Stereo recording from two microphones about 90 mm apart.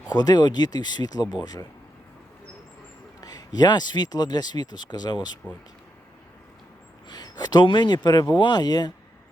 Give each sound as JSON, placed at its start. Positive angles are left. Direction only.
{"t": 0.1, "sound": "speech", "side_deg": 50}
{"t": 3.2, "sound": "speech", "side_deg": 45}
{"t": 7.1, "sound": "speech", "side_deg": 50}